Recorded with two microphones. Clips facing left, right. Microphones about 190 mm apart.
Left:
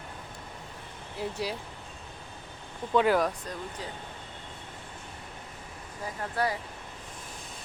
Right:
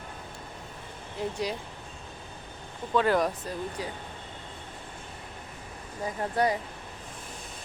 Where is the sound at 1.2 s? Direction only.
5° left (ahead or behind).